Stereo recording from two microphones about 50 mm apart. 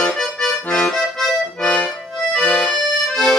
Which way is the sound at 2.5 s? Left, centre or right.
Left.